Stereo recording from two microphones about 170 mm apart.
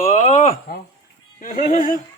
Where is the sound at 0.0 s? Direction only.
40° left (ahead or behind).